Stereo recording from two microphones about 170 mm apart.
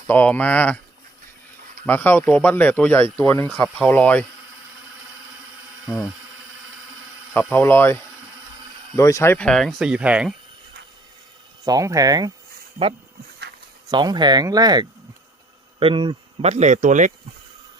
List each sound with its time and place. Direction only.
0.1 s speech: 10° left (ahead or behind)
1.9 s speech: 10° left (ahead or behind)
5.8 s a sound: centre (ahead or behind)
7.3 s speech: 10° left (ahead or behind)
9.0 s speech: 20° left (ahead or behind); by 10.3 s 5° right (ahead or behind)
11.6 s speech: 20° right (ahead or behind)
13.9 s speech: 25° right (ahead or behind); by 17.1 s 45° right (ahead or behind)